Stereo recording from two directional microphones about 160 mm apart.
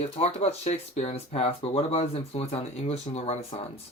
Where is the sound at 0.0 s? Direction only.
40° left (ahead or behind).